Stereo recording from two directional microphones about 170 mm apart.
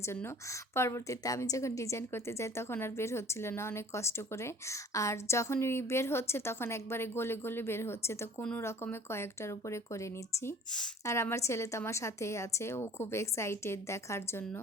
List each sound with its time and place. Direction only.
0.0 s a woman's voice: 15° left (ahead or behind)